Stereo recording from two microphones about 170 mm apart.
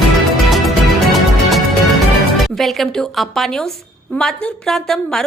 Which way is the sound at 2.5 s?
Centre (ahead or behind).